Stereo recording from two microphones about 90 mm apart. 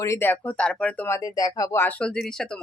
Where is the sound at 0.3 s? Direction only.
15° left (ahead or behind).